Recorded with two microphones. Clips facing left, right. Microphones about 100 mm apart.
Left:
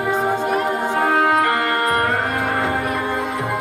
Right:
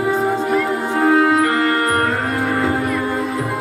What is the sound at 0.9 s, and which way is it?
Music, 30° left (ahead or behind).